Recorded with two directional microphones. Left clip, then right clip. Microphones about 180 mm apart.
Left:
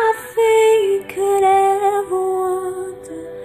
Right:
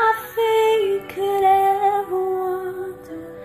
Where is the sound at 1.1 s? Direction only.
10° left (ahead or behind).